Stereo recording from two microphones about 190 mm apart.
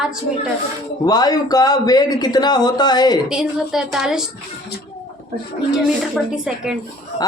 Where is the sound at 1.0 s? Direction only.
20° left (ahead or behind).